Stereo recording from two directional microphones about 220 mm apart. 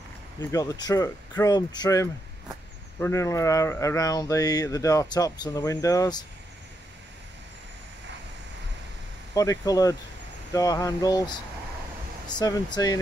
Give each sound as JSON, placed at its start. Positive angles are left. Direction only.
{"t": 0.4, "sound": "mantra", "side_deg": 15}
{"t": 9.3, "sound": "mantra", "side_deg": 15}
{"t": 12.3, "sound": "speech", "side_deg": 20}